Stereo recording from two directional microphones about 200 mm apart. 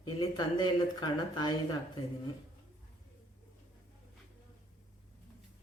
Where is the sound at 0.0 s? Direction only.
20° left (ahead or behind).